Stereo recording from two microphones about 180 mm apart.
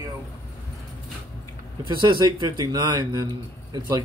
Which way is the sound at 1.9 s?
25° right (ahead or behind).